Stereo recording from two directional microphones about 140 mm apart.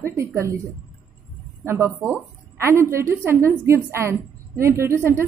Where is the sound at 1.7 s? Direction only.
20° right (ahead or behind).